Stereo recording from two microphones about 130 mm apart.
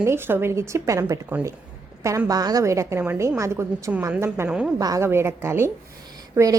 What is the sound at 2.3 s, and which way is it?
A woman's voice, 30° right (ahead or behind).